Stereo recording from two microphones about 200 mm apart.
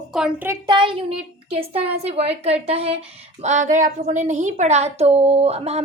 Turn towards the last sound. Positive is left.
turn(degrees=-30)  # may be behind; listen again after turning